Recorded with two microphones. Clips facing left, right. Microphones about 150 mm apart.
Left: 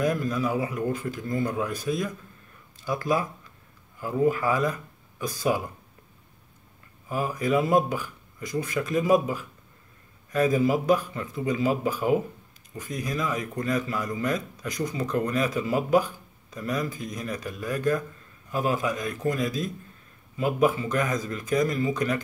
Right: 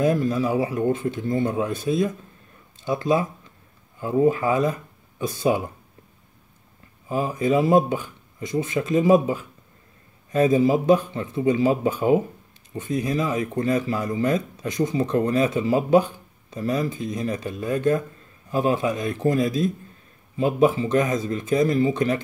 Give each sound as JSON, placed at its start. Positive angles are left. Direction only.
{"t": 0.0, "sound": "speech", "side_deg": -25}
{"t": 7.1, "sound": "speech", "side_deg": -20}